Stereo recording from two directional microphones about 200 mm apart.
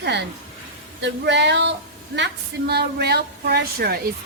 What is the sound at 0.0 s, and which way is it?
A woman's voice, 60° right (ahead or behind).